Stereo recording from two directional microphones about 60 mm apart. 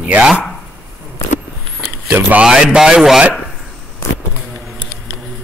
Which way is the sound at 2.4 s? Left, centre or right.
Centre.